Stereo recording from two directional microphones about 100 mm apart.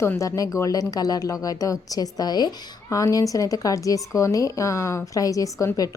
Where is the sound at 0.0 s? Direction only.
30° left (ahead or behind).